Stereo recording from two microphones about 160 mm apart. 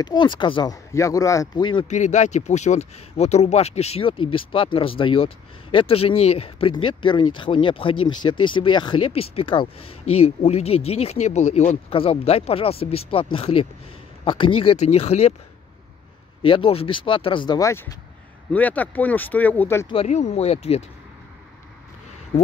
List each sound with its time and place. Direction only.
0.0 s speech: 30° left (ahead or behind)
1.9 s speech: 50° left (ahead or behind)
16.4 s speech: 35° left (ahead or behind); by 19.9 s 15° left (ahead or behind)
19.9 s speech: 40° left (ahead or behind)